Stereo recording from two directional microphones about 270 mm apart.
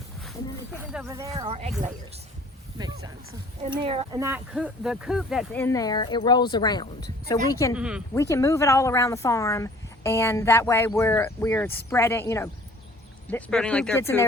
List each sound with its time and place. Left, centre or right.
0.2 s a sound: centre; by 1.7 s right
3.7 s speech: centre
4.2 s speech: centre
7.8 s speech: centre
8.1 s speech: centre